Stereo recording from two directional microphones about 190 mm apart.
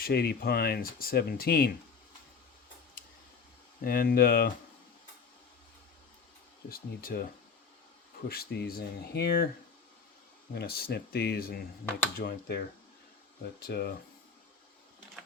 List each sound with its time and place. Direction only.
0.0 s speech: 55° left (ahead or behind)
3.8 s speech: 50° left (ahead or behind)
6.7 s speech: 50° left (ahead or behind)
8.3 s speech: 55° left (ahead or behind)
10.5 s speech: 55° left (ahead or behind)